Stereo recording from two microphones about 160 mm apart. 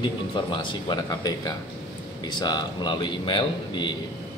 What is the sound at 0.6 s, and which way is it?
A man's voice, 25° left (ahead or behind).